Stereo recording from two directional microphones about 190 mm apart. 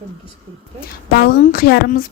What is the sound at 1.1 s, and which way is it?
Speech, 60° left (ahead or behind).